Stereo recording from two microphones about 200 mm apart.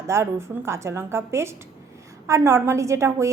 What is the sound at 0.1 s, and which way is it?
A woman's voice, 15° right (ahead or behind).